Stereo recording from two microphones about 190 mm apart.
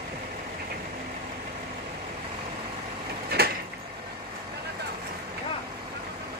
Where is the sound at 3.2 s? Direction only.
55° right (ahead or behind).